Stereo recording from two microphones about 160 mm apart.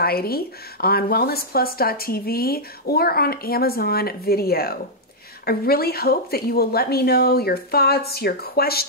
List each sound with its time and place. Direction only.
0.0 s speech: 75° left (ahead or behind)